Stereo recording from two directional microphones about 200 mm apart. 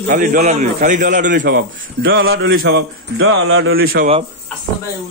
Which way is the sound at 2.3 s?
80° right.